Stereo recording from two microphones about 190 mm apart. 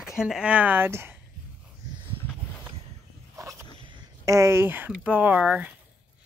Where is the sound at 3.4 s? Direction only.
15° right (ahead or behind).